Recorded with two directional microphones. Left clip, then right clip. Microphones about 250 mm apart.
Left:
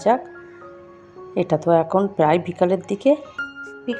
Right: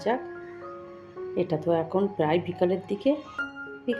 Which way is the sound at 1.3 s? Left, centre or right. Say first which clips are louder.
Left 8 dB; left.